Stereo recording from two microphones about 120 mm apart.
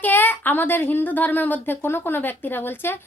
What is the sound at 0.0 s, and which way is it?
A woman's voice, 15° left (ahead or behind).